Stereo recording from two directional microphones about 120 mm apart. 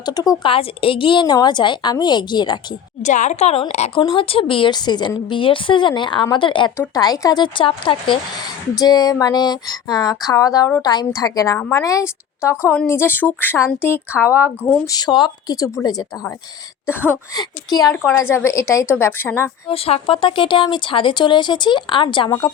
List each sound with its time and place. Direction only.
0.0 s a woman's voice: 35° left (ahead or behind)
0.4 s a woman's voice: 50° left (ahead or behind)
3.0 s a woman's voice: 90° left; by 4.0 s 65° left (ahead or behind)
4.0 s a woman's voice: 50° left (ahead or behind)
6.7 s a woman's voice: 30° left (ahead or behind)
8.7 s a woman's voice: 35° left (ahead or behind)
14.8 s a woman's voice: 35° left (ahead or behind)
16.8 s a woman's voice: 15° left (ahead or behind)
17.3 s a woman's voice: 35° left (ahead or behind)
18.1 s a woman's voice: 20° left (ahead or behind)
19.6 s speech: 55° left (ahead or behind)